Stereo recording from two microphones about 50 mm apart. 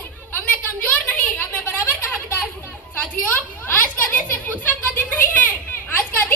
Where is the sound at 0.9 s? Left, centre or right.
Left.